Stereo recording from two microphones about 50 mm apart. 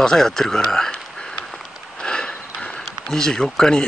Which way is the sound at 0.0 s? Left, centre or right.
Centre.